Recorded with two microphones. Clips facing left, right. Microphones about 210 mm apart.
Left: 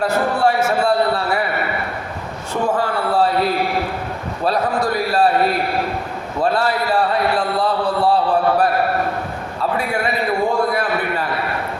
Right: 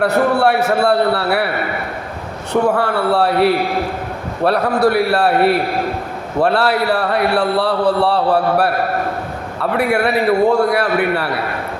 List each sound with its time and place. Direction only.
0.0 s a man's voice: 65° right (ahead or behind)
2.5 s a man's voice: 65° right (ahead or behind)